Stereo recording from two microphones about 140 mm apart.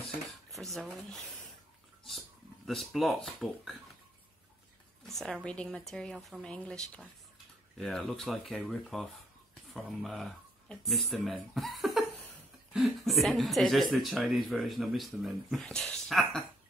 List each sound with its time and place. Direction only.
0.3 s a sound: centre (ahead or behind)
3.3 s speech: centre (ahead or behind)
5.0 s speech: centre (ahead or behind)